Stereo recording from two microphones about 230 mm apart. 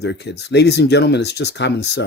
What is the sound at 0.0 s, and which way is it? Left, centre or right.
Speech, left.